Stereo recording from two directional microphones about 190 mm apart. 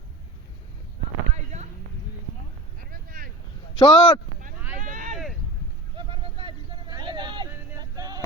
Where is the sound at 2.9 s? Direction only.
50° right (ahead or behind).